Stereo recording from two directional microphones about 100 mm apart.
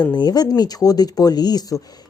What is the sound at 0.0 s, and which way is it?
Speech, 45° left (ahead or behind).